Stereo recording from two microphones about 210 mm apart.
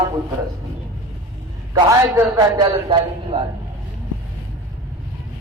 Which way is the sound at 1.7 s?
15° right (ahead or behind).